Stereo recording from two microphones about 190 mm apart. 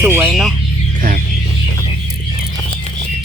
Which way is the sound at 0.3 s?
Centre (ahead or behind).